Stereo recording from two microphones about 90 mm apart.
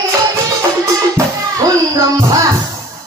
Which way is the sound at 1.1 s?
35° right (ahead or behind).